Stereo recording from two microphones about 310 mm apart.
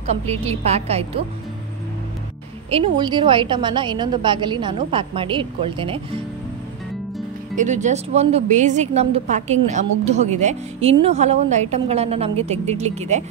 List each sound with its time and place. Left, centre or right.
0.0 s a woman's voice: right
2.7 s a woman's voice: centre
7.5 s a woman's voice: right